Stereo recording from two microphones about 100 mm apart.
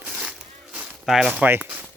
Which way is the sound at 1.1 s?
5° right (ahead or behind).